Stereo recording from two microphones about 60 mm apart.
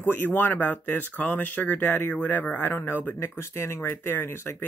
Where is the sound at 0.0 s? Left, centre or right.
Left.